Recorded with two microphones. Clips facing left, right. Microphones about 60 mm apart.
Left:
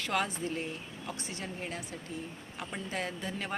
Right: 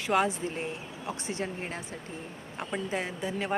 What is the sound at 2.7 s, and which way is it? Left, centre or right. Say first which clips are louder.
Speech: right 4 dB; centre.